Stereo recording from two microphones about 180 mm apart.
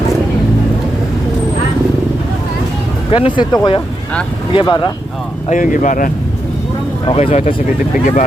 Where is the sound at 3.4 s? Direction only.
25° left (ahead or behind).